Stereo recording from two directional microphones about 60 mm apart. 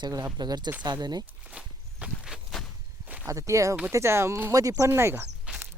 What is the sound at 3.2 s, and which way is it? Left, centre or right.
Speech, right.